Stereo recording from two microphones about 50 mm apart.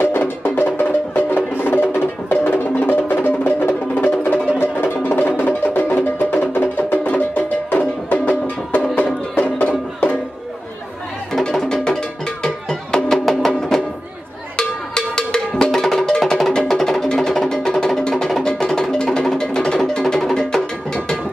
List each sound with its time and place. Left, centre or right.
0.0 s music: left
11.5 s percussion: centre
12.4 s music: centre
14.6 s percussion: centre
16.2 s music: centre